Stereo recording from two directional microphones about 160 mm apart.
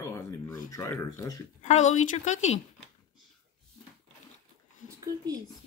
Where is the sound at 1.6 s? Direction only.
45° left (ahead or behind).